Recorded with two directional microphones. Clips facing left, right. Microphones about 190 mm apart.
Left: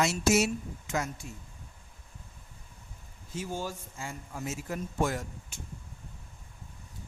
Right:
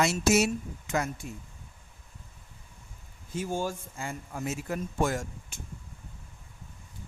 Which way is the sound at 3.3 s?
50° right (ahead or behind).